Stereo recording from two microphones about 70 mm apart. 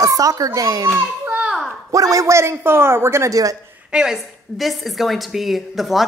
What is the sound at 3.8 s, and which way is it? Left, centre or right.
A woman's voice, centre.